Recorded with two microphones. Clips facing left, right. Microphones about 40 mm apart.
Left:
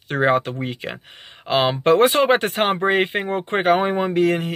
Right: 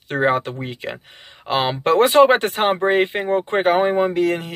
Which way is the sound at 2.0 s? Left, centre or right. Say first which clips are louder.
Right 3 dB; left.